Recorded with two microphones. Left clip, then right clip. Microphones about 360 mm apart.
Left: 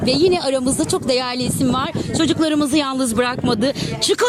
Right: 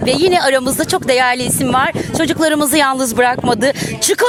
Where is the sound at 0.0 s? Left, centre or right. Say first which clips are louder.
Right 4 dB; centre.